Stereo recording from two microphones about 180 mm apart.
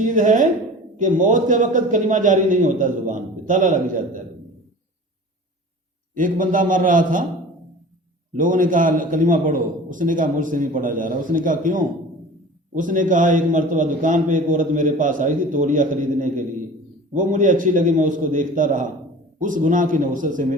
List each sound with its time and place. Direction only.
0.0 s a man's voice: 45° right (ahead or behind)
6.1 s a man's voice: 45° right (ahead or behind)
8.3 s a man's voice: 45° right (ahead or behind)